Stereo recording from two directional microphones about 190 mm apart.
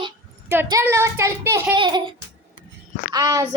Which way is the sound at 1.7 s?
25° right (ahead or behind).